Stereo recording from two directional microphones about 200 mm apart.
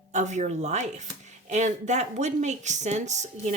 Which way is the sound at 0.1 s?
35° right (ahead or behind).